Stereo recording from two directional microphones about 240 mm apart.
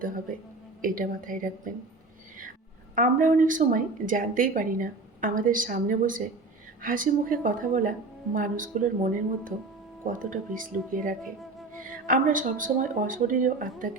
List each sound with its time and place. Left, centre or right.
0.8 s a woman's voice: right
2.9 s a woman's voice: right